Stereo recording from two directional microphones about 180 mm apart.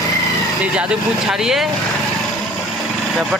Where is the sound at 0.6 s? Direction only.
5° right (ahead or behind).